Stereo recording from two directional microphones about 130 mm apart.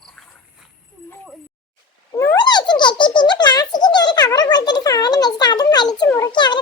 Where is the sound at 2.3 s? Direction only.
35° left (ahead or behind).